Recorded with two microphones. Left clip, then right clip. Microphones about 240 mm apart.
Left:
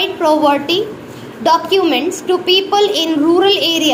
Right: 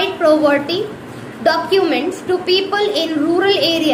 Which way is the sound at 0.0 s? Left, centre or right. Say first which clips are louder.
Left 1 dB; left.